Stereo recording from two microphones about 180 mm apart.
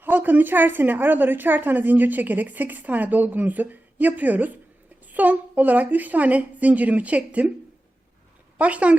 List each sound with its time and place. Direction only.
0.0 s a woman's voice: 10° right (ahead or behind)
8.5 s speech: 10° right (ahead or behind)